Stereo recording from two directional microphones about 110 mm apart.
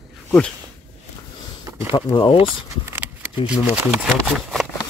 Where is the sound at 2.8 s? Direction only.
20° right (ahead or behind).